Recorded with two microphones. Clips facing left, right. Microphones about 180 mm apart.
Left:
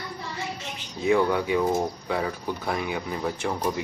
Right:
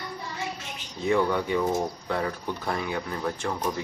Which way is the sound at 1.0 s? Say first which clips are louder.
Left 2 dB; 10° left (ahead or behind).